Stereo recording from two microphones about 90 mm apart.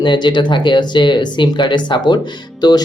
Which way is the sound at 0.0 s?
60° left (ahead or behind).